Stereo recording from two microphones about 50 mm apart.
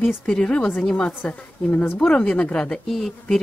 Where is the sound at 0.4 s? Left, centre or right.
Left.